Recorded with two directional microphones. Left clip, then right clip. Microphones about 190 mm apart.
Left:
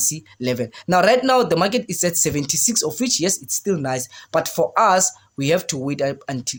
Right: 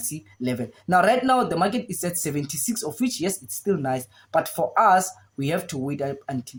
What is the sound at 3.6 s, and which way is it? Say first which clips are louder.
Speech: left 1 dB; 40° left (ahead or behind).